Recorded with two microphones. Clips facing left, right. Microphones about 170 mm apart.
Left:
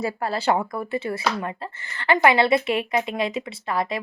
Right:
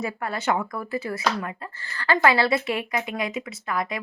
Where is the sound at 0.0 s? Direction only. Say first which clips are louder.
Left 3 dB; 30° left (ahead or behind).